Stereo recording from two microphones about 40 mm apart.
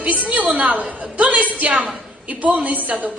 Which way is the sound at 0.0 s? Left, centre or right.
Right.